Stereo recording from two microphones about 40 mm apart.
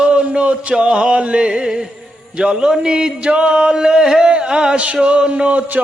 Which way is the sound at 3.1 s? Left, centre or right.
Right.